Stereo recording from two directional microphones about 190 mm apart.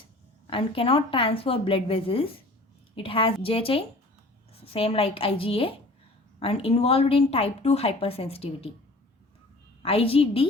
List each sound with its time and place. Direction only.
0.5 s a woman's voice: 30° left (ahead or behind)
9.8 s a woman's voice: 30° left (ahead or behind)